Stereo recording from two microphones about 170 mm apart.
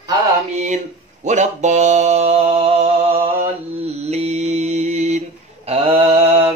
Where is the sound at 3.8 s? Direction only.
40° right (ahead or behind).